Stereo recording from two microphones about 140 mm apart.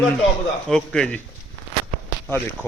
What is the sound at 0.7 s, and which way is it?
Speech, 5° left (ahead or behind).